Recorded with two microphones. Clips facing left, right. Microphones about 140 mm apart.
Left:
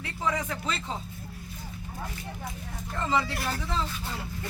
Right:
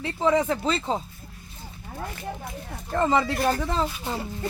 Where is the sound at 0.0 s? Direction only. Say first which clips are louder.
Right 8 dB; 30° right (ahead or behind).